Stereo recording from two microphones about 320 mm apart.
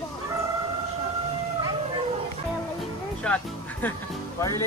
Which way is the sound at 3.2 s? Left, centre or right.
Centre.